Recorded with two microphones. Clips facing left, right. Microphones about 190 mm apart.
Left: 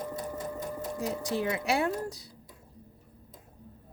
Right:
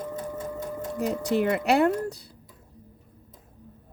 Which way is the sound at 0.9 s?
65° right (ahead or behind).